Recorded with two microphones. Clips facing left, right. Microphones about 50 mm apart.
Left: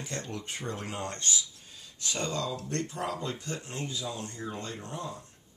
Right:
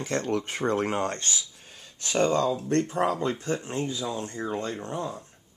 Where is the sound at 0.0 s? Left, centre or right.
Right.